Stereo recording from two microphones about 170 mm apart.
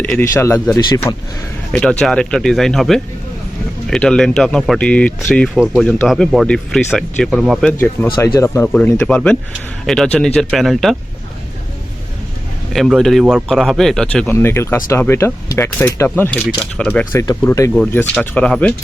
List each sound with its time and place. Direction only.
0.0 s speech: 10° left (ahead or behind)
1.7 s speech: 5° left (ahead or behind)
7.7 s speech: 10° left (ahead or behind)
12.7 s speech: centre (ahead or behind); by 17.7 s 20° left (ahead or behind)
17.7 s speech: 5° left (ahead or behind)